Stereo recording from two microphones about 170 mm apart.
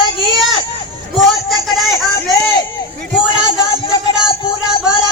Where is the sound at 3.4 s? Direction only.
25° left (ahead or behind).